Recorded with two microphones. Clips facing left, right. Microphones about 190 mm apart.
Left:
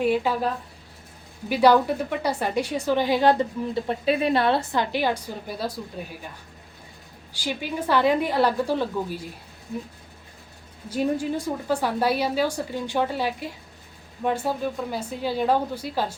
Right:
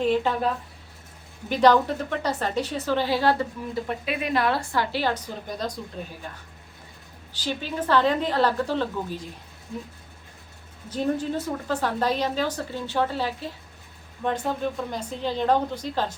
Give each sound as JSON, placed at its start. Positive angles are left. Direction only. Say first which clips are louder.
{"t": 0.0, "sound": "a woman's voice", "louder": "even", "side_deg": 10}
{"t": 1.5, "sound": "a woman's voice", "louder": "left 1 dB", "side_deg": 10}
{"t": 3.8, "sound": "a woman's voice", "louder": "left 9 dB", "side_deg": 30}
{"t": 7.3, "sound": "a woman's voice", "louder": "even", "side_deg": 10}
{"t": 10.8, "sound": "a woman's voice", "louder": "left 1 dB", "side_deg": 10}